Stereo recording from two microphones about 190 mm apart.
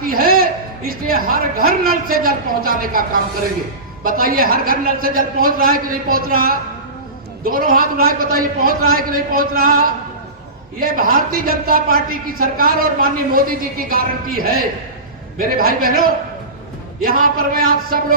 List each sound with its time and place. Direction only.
0.0 s music: 50° right (ahead or behind)
0.9 s a man's voice: 50° right (ahead or behind)